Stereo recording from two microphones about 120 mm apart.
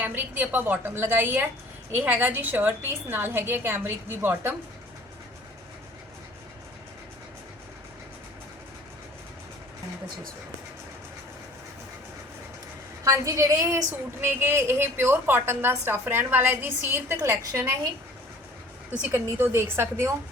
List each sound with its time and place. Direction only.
0.0 s a woman's voice: 15° right (ahead or behind)
13.1 s a woman's voice: 25° right (ahead or behind)
14.2 s a woman's voice: 15° right (ahead or behind)
19.1 s a woman's voice: 20° right (ahead or behind)